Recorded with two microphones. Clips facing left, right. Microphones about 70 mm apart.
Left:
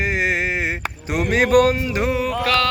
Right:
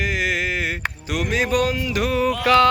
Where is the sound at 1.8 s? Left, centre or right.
Left.